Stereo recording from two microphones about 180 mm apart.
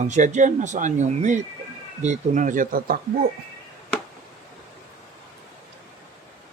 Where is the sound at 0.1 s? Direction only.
40° right (ahead or behind).